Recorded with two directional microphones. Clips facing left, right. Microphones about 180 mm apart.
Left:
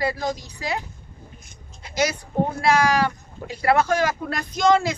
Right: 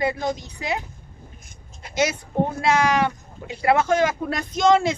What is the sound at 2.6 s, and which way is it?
A woman's voice, 20° right (ahead or behind).